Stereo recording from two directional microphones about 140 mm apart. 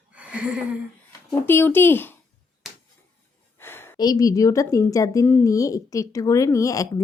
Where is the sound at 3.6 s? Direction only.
15° left (ahead or behind).